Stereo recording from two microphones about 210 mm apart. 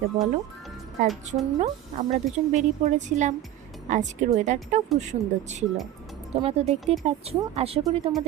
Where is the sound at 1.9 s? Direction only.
35° right (ahead or behind).